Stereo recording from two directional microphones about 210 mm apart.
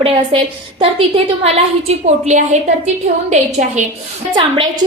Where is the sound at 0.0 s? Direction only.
25° right (ahead or behind).